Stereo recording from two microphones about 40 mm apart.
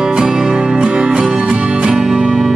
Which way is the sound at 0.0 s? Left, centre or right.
Centre.